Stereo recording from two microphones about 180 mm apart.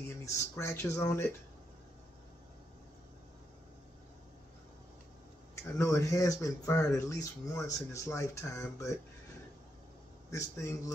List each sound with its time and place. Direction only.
0.2 s speech: 15° left (ahead or behind)
5.6 s speech: 15° left (ahead or behind)
10.3 s speech: 15° left (ahead or behind)